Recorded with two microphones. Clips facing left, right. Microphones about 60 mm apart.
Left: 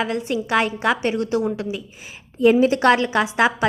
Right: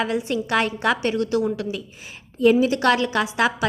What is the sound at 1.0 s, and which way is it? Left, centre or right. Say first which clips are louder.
A woman's voice: even; left.